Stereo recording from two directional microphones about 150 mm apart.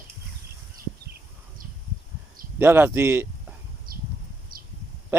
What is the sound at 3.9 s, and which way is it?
Bee, 75° right (ahead or behind).